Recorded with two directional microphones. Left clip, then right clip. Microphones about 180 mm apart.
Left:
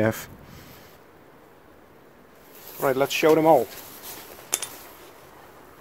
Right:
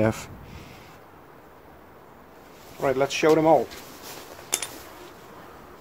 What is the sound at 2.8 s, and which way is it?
Speech, 40° left (ahead or behind).